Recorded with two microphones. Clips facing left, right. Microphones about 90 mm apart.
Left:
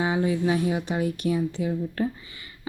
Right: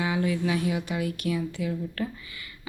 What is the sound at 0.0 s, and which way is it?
Speech, 30° left (ahead or behind).